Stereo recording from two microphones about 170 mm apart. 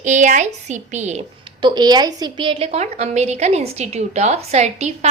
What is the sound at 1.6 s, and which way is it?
A woman's voice, 25° right (ahead or behind).